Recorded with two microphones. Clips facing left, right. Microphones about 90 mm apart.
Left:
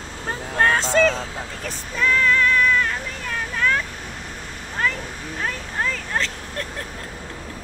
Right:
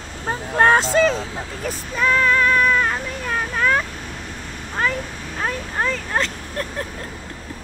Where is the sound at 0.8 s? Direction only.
10° right (ahead or behind).